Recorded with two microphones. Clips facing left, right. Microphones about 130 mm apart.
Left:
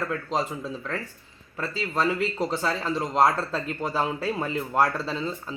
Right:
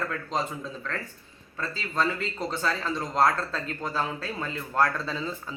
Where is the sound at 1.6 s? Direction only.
10° left (ahead or behind).